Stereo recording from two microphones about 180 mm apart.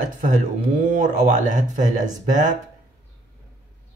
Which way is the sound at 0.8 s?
45° right (ahead or behind).